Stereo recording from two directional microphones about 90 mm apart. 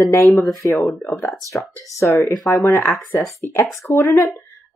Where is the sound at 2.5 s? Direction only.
25° left (ahead or behind); by 4.4 s 40° left (ahead or behind).